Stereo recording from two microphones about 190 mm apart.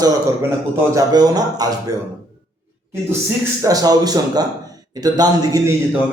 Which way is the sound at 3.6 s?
20° right (ahead or behind).